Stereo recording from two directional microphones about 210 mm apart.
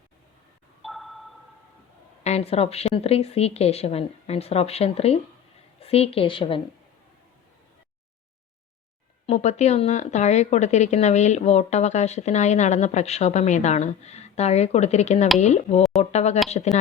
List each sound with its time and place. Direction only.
0.8 s a sound: centre (ahead or behind)
2.2 s a woman's voice: 30° left (ahead or behind)
9.2 s speech: 30° left (ahead or behind)